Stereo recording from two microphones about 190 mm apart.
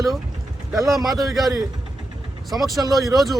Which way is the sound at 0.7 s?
Centre (ahead or behind).